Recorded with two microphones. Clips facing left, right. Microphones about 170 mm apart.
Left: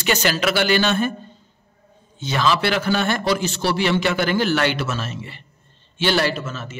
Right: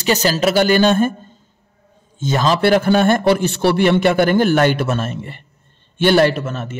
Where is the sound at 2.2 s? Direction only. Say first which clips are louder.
Right 4 dB; 45° right (ahead or behind).